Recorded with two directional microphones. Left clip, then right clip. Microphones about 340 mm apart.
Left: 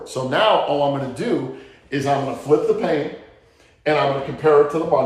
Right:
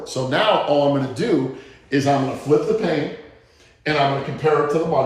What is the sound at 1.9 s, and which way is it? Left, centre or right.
Speech, centre.